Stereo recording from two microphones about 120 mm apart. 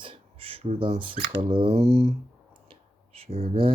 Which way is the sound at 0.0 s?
50° right (ahead or behind).